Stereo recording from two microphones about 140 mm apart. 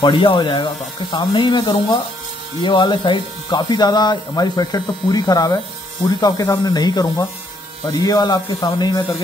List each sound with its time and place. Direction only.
0.0 s speech: 35° left (ahead or behind)